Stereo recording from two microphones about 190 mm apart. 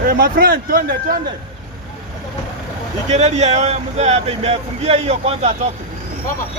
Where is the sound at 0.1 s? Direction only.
50° right (ahead or behind).